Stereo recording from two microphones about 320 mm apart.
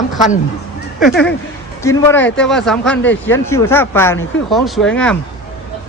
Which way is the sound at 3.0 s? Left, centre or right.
Left.